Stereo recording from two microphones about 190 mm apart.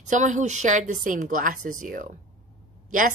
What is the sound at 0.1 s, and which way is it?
A woman's voice, 40° right (ahead or behind).